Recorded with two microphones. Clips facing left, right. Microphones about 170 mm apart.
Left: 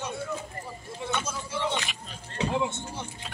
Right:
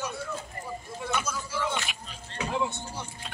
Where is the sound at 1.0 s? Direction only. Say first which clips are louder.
Even; 25° left (ahead or behind).